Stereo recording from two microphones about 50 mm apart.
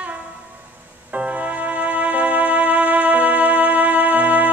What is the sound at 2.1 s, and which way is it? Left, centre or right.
Music, right.